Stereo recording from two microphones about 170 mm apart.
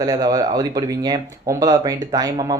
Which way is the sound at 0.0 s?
20° right (ahead or behind).